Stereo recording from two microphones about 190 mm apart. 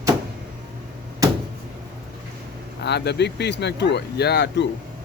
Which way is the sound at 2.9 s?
60° left (ahead or behind).